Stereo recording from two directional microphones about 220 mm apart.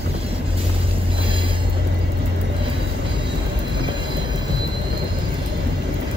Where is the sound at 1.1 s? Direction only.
25° right (ahead or behind).